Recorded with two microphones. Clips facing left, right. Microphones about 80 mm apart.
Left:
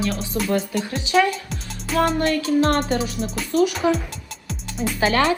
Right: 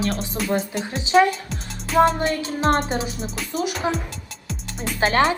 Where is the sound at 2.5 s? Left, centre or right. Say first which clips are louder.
Left 2 dB; right.